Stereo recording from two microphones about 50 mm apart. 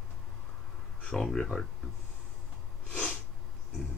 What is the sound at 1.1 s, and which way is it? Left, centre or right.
Speech, centre.